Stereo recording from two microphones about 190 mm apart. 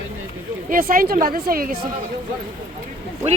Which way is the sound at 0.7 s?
50° right (ahead or behind).